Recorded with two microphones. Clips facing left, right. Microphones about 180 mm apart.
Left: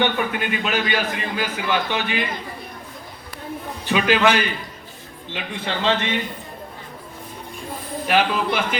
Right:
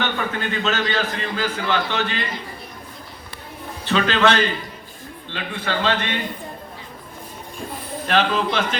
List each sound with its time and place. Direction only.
0.0 s a man's voice: 15° left (ahead or behind)
3.8 s a man's voice: 15° left (ahead or behind)
8.0 s a man's voice: 10° left (ahead or behind)